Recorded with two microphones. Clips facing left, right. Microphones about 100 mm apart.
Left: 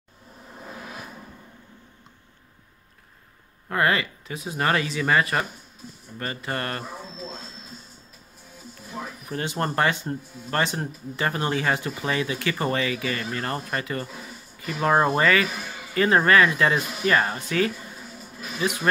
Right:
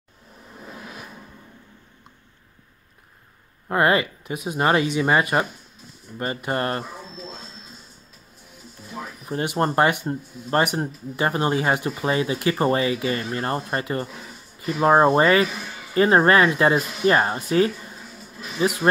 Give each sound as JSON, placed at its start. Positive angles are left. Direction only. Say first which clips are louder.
{"t": 3.6, "sound": "speech", "louder": "right 4 dB", "side_deg": -25}
{"t": 9.2, "sound": "a sound", "louder": "right 5 dB", "side_deg": -25}
{"t": 9.6, "sound": "speech", "louder": "right 4 dB", "side_deg": -25}